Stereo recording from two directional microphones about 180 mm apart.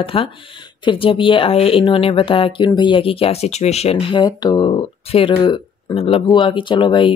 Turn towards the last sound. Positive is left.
turn(degrees=25)  # may be behind; listen again after turning